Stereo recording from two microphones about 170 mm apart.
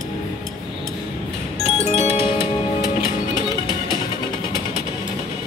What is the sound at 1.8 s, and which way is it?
Music, 40° left (ahead or behind).